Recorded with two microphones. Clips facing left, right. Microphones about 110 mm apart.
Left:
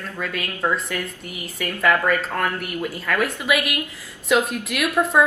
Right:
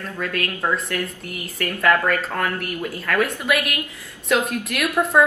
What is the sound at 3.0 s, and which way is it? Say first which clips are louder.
Speech: right 1 dB; centre (ahead or behind).